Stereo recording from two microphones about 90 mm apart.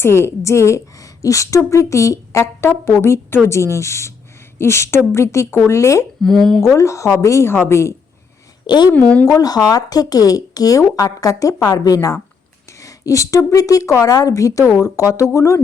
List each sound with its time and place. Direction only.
0.0 s a woman's voice: 30° left (ahead or behind)
6.2 s speech: 5° left (ahead or behind)
6.7 s a woman's voice: 35° left (ahead or behind)
8.6 s speech: 55° left (ahead or behind)
9.2 s a woman's voice: 40° left (ahead or behind)